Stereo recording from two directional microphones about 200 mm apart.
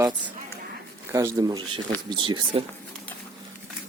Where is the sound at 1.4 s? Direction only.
20° right (ahead or behind).